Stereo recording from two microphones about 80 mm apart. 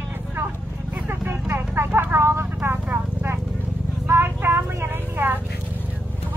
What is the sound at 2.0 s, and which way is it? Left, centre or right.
Clip-clop, right.